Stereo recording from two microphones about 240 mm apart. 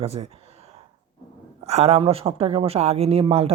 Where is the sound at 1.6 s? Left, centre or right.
Right.